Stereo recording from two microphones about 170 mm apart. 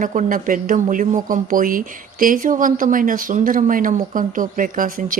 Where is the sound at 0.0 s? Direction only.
50° right (ahead or behind).